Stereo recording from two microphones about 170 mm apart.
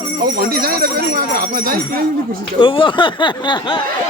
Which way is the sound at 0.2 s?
60° right (ahead or behind).